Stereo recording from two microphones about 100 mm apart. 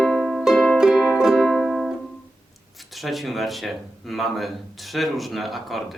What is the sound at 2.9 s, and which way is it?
Speech, centre (ahead or behind).